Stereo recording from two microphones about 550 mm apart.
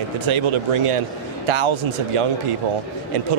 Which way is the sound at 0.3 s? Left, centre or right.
Right.